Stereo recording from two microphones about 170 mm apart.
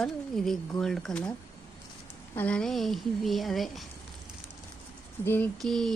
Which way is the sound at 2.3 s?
5° left (ahead or behind).